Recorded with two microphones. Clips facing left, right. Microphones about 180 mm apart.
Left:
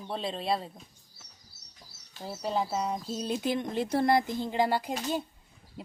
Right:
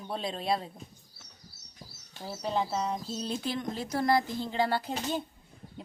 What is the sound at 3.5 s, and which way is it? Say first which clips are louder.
Speech: left 4 dB; 25° left (ahead or behind).